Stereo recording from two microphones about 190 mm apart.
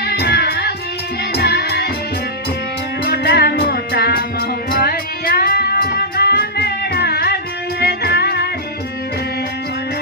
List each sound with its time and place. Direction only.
0.0 s music: 55° left (ahead or behind)
3.1 s music: 60° left (ahead or behind)